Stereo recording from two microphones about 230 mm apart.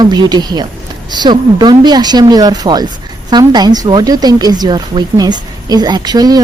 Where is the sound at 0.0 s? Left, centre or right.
Centre.